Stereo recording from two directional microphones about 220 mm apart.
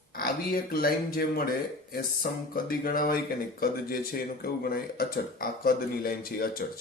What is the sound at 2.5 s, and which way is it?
Speech, 40° left (ahead or behind).